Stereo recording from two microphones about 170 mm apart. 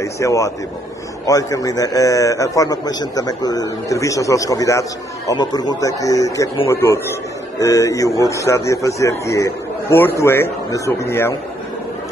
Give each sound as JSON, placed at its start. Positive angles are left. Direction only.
{"t": 0.0, "sound": "a man's voice", "side_deg": 20}